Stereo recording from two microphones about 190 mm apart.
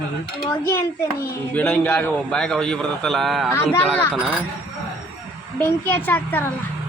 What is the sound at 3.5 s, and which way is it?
Speech, 10° left (ahead or behind).